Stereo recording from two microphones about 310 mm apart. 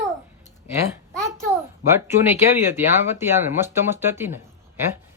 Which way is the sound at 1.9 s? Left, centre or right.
Centre.